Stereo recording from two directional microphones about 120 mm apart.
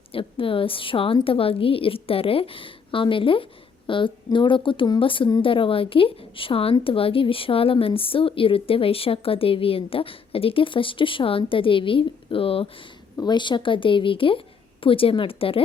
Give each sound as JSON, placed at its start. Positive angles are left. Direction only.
{"t": 0.1, "sound": "a woman's voice", "side_deg": 50}
{"t": 13.2, "sound": "a woman's voice", "side_deg": 40}